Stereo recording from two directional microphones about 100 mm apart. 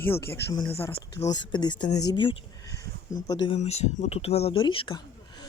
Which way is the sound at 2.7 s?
35° left (ahead or behind).